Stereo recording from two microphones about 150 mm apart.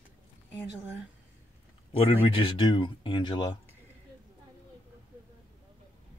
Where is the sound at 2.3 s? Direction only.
35° left (ahead or behind).